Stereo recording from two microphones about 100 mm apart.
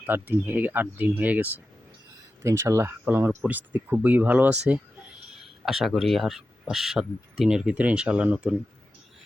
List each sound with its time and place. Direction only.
0.0 s speech: 20° right (ahead or behind)
2.4 s speech: 30° right (ahead or behind); by 4.8 s 15° right (ahead or behind)
5.3 s speech: centre (ahead or behind)